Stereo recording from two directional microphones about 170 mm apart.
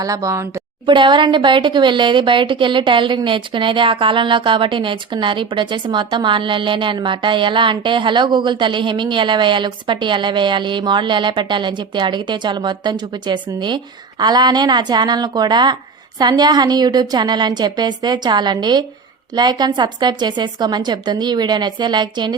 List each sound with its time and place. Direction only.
0.0 s speech: 20° right (ahead or behind)